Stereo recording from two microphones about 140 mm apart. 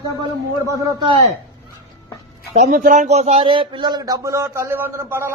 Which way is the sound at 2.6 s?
70° right (ahead or behind).